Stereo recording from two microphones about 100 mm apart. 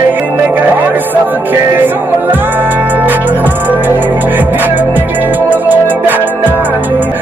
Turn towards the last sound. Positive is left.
turn(degrees=-20)  # may be behind; listen again after turning